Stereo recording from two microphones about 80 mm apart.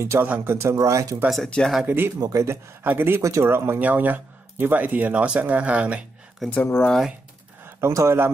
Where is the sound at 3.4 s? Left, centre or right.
Right; by 6.0 s centre.